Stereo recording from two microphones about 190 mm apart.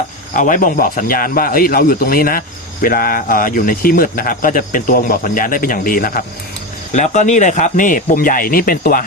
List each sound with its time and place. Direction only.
0.3 s speech: 45° left (ahead or behind)